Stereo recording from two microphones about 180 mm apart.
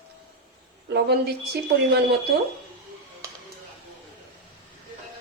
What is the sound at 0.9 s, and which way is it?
Speech, 65° right (ahead or behind).